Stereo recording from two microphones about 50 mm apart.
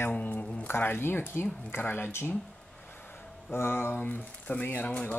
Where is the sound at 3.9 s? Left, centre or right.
Left.